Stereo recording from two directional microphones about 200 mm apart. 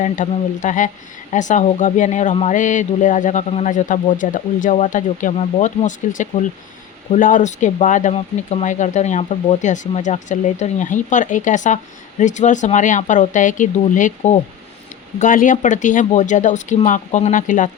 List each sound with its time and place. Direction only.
0.0 s speech: 40° left (ahead or behind)